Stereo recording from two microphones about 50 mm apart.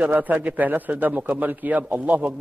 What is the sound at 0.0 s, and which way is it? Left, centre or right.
A man's voice, right.